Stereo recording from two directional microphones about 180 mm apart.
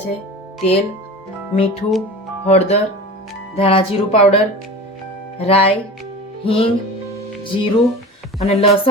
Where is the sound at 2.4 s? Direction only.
35° left (ahead or behind).